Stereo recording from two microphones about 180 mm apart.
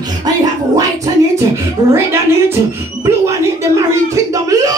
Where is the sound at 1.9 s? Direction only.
15° right (ahead or behind).